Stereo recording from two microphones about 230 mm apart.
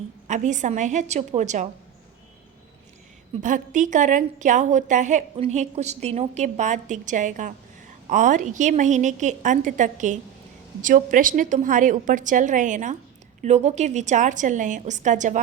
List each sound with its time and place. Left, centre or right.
0.3 s a woman's voice: right
3.4 s a woman's voice: right